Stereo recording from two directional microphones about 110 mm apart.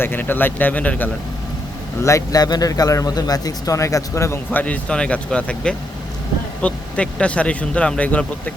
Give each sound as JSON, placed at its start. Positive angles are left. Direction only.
{"t": 0.0, "sound": "speech", "side_deg": 20}
{"t": 2.0, "sound": "speech", "side_deg": 30}
{"t": 4.5, "sound": "speech", "side_deg": 10}